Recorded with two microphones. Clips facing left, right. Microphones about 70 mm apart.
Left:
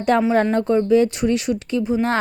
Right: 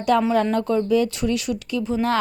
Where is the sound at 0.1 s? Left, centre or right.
Left.